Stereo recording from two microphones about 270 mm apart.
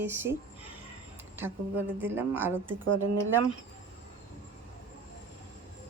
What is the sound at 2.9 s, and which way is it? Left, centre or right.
Speech, right.